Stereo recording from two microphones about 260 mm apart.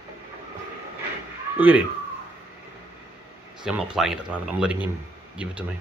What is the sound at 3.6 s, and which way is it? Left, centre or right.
Speech, centre.